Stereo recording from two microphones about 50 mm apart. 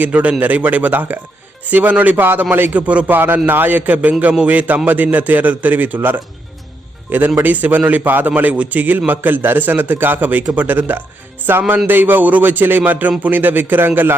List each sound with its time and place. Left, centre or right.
0.0 s a man's voice: right
2.1 s speech: right
2.7 s a man's voice: right
3.1 s a man's voice: right
7.1 s a man's voice: right